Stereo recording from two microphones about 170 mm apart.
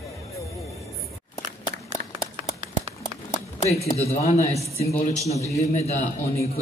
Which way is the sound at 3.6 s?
40° left (ahead or behind).